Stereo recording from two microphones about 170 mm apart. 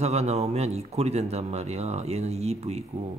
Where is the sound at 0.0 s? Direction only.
40° right (ahead or behind).